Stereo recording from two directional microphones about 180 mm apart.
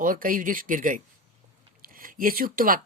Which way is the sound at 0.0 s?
50° right (ahead or behind).